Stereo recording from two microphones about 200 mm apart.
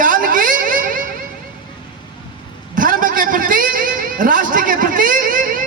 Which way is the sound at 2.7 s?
45° right (ahead or behind).